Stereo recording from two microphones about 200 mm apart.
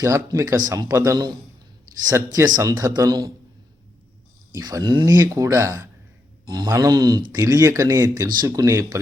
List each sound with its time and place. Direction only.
0.0 s speech: 15° right (ahead or behind)
4.5 s speech: 20° right (ahead or behind)